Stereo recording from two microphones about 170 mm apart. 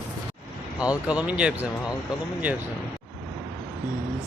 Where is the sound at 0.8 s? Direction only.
5° right (ahead or behind).